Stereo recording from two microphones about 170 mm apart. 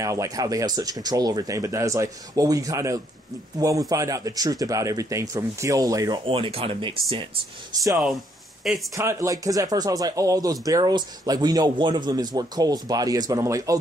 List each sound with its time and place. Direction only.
0.0 s speech: 20° right (ahead or behind)
8.6 s speech: centre (ahead or behind)
8.9 s speech: 20° right (ahead or behind)